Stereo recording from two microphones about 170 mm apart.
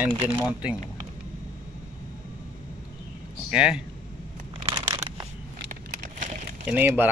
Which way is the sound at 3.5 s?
5° right (ahead or behind).